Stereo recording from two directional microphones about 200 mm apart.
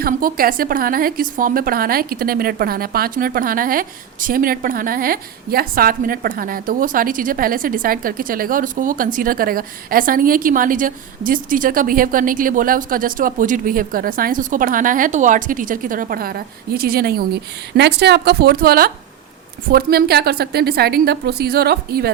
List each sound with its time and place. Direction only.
0.0 s a woman's voice: 45° right (ahead or behind)